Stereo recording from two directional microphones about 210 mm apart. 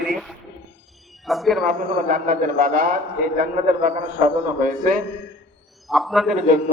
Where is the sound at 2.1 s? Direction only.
40° right (ahead or behind).